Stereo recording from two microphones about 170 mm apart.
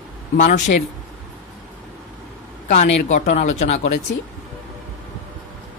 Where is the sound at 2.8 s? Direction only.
45° left (ahead or behind).